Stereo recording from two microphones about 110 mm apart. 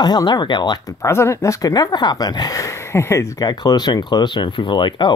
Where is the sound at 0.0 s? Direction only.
40° left (ahead or behind).